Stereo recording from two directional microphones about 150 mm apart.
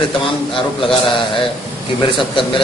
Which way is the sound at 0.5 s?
35° left (ahead or behind).